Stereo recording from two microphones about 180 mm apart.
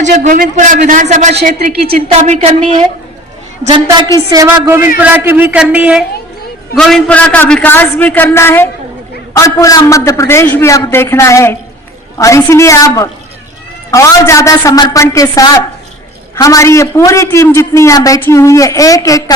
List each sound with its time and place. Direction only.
0.0 s a man's voice: 45° right (ahead or behind)
1.5 s speech: 55° right (ahead or behind)
2.1 s speech: 35° right (ahead or behind)
4.3 s a man's voice: 20° right (ahead or behind)
6.7 s a man's voice: 5° left (ahead or behind)